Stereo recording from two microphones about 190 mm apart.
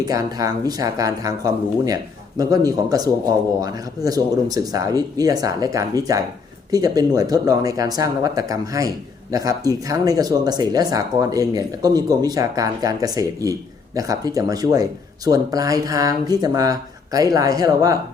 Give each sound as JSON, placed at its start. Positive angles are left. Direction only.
{"t": 0.1, "sound": "speech", "side_deg": -20}